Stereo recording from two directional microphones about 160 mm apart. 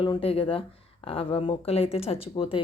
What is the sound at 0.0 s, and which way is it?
Speech, 35° left (ahead or behind).